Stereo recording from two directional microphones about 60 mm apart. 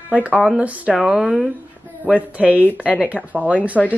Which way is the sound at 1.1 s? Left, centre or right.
Centre.